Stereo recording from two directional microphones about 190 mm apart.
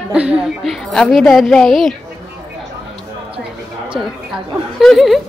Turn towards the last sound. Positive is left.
turn(degrees=0)  # may be behind; listen again after turning